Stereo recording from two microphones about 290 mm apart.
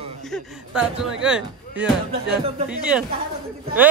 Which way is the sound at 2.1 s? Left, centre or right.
Centre.